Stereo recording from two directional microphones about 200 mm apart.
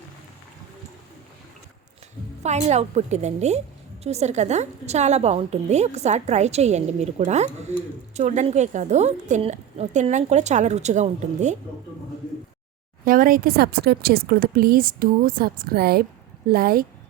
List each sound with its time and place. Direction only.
2.4 s a woman's voice: 35° right (ahead or behind)
13.1 s speech: 45° right (ahead or behind)